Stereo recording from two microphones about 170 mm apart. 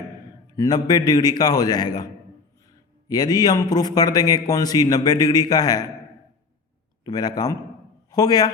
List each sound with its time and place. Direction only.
0.5 s a man's voice: 25° left (ahead or behind)
7.0 s a man's voice: 25° left (ahead or behind)